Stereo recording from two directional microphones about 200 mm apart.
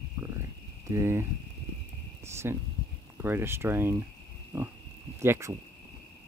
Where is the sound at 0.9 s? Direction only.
15° right (ahead or behind).